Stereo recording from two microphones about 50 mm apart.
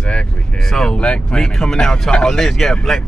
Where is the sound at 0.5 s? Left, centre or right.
Centre.